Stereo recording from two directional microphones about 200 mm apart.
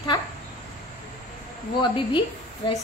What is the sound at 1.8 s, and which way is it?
Speech, 25° left (ahead or behind).